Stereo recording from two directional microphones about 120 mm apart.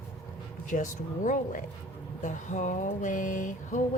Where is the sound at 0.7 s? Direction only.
90° left.